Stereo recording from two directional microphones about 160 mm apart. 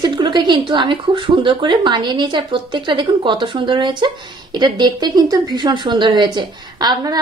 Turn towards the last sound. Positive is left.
turn(degrees=-25)  # may be behind; listen again after turning